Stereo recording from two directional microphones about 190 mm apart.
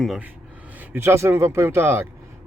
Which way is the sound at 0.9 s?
15° right (ahead or behind).